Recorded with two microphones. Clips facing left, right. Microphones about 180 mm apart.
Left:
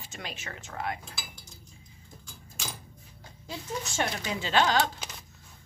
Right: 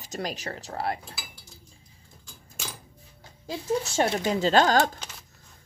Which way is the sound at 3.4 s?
30° right (ahead or behind).